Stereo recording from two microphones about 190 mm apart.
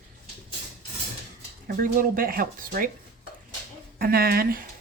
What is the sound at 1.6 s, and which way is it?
Speech, 50° right (ahead or behind).